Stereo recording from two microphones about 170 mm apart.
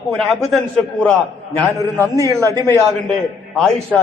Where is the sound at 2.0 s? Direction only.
20° right (ahead or behind).